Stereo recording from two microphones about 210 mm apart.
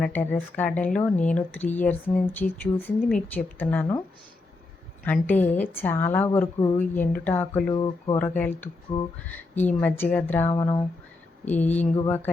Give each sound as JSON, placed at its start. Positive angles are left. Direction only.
{"t": 0.0, "sound": "speech", "side_deg": 10}
{"t": 5.0, "sound": "speech", "side_deg": 10}
{"t": 7.7, "sound": "speech", "side_deg": 20}
{"t": 8.2, "sound": "speech", "side_deg": 10}
{"t": 10.5, "sound": "speech", "side_deg": 20}
{"t": 11.4, "sound": "speech", "side_deg": 10}